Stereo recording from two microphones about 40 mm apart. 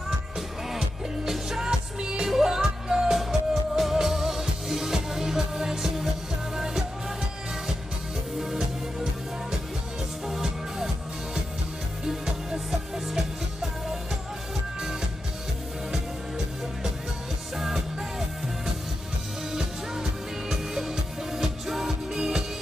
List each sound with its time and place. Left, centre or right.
0.7 s music: centre
8.4 s music: centre
10.2 s music: centre
17.6 s music: centre
19.5 s music: centre